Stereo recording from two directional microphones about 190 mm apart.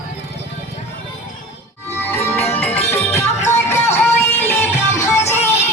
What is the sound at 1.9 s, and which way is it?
Music, 10° left (ahead or behind).